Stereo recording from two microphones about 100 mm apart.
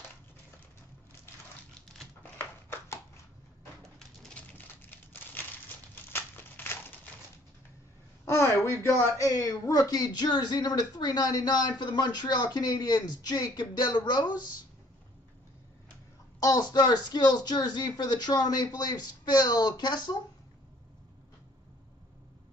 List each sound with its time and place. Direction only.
2.3 s a sound: 25° left (ahead or behind)
4.2 s crumpling: 10° left (ahead or behind)
8.3 s speech: 25° left (ahead or behind); by 14.3 s 45° left (ahead or behind)
16.3 s speech: 40° left (ahead or behind)